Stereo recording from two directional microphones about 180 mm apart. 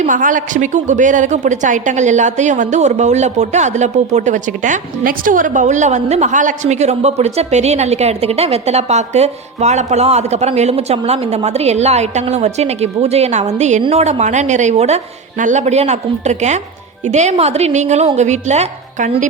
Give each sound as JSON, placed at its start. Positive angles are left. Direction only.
{"t": 0.0, "sound": "a woman's voice", "side_deg": -45}